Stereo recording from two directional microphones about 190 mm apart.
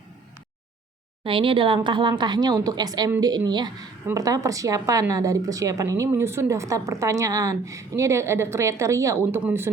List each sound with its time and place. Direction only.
1.2 s speech: 25° right (ahead or behind); by 9.7 s 10° right (ahead or behind)